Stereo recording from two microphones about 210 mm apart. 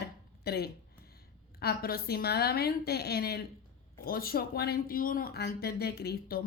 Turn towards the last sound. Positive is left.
turn(degrees=50)  # may be behind; listen again after turning